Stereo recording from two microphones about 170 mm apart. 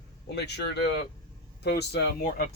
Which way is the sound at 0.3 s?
75° left (ahead or behind).